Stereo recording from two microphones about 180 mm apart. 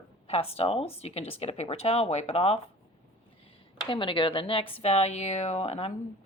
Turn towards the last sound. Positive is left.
turn(degrees=35)  # may be behind; listen again after turning